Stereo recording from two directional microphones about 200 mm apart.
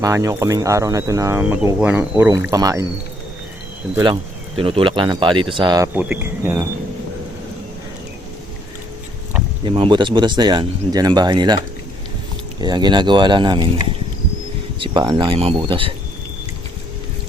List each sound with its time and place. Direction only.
0.0 s speech: 15° right (ahead or behind)
3.9 s speech: 25° right (ahead or behind)
9.6 s speech: 25° right (ahead or behind)
14.8 s speech: 25° right (ahead or behind)